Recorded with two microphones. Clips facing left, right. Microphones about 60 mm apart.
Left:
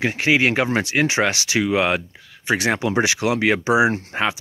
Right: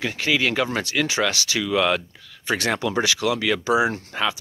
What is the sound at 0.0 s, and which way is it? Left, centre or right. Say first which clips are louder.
Speech: left 4 dB; left.